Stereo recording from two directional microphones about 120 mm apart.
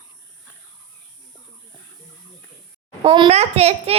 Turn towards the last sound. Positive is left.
turn(degrees=-60)  # may be behind; listen again after turning